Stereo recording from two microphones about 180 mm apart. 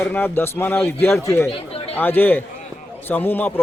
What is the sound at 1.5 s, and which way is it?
Chatter, 30° left (ahead or behind).